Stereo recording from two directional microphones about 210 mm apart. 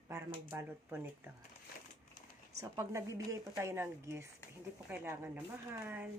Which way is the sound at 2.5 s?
15° right (ahead or behind).